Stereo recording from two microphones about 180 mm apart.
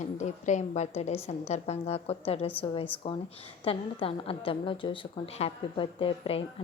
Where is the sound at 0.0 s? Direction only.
40° left (ahead or behind).